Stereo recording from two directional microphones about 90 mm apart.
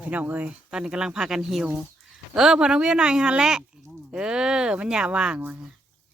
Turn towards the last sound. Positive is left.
turn(degrees=-15)  # may be behind; listen again after turning